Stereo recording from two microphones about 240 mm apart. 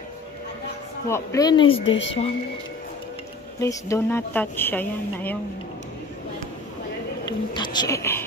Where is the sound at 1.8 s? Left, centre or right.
Left.